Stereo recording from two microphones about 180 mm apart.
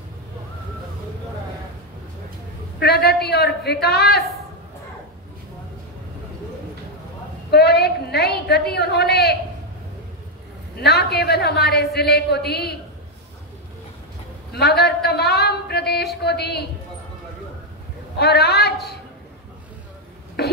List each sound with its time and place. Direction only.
2.8 s a man's voice: 65° left (ahead or behind)
7.5 s a woman's voice: 65° left (ahead or behind)
10.8 s a man's voice: 65° left (ahead or behind)
14.5 s a man's voice: 65° left (ahead or behind)
18.2 s a man's voice: 65° left (ahead or behind)
20.4 s a sound: 60° left (ahead or behind)